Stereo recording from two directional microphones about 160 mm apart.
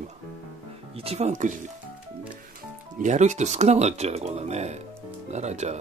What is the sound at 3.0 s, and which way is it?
Speech, 45° right (ahead or behind).